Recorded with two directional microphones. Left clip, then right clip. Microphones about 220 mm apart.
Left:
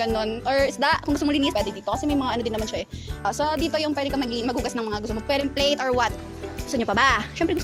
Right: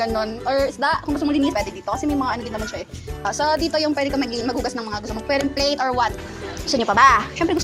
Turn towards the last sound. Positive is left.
turn(degrees=45)  # may be behind; listen again after turning